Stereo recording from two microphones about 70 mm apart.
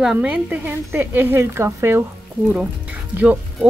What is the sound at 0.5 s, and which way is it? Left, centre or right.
Speech, right.